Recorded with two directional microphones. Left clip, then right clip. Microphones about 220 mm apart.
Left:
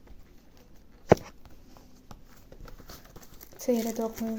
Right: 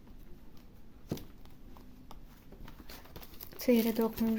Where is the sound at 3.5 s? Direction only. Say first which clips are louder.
Even; 25° right (ahead or behind).